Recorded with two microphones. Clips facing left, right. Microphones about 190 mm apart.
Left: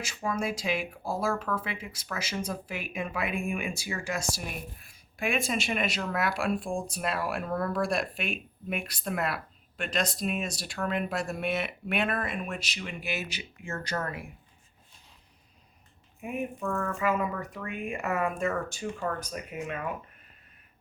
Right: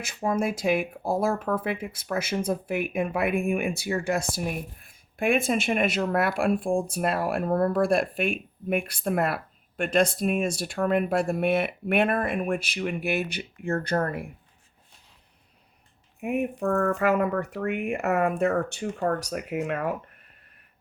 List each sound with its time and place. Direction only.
0.3 s speech: 55° right (ahead or behind)
16.2 s speech: 65° right (ahead or behind)